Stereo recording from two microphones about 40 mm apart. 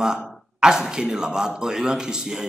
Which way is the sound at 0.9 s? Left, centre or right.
Centre.